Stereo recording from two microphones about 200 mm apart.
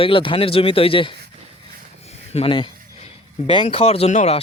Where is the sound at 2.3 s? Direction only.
25° left (ahead or behind).